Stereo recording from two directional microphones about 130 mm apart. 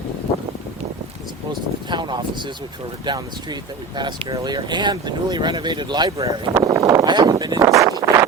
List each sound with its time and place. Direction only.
1.9 s speech: 35° right (ahead or behind)